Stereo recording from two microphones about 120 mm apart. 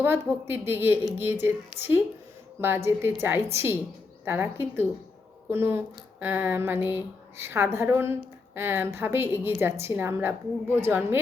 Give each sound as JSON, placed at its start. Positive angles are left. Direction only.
{"t": 0.4, "sound": "speech", "side_deg": -20}